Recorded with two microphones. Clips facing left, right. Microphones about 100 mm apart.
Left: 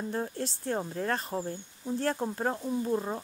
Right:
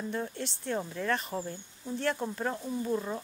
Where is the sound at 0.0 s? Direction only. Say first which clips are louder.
Left 2 dB; 40° left (ahead or behind).